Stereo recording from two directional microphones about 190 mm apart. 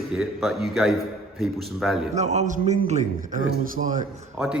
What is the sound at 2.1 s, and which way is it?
A man's voice, 35° right (ahead or behind).